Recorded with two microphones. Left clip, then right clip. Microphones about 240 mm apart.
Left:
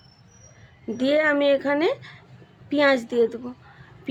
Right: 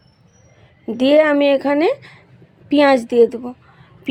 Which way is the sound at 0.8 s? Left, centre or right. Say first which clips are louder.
Right 8 dB; right.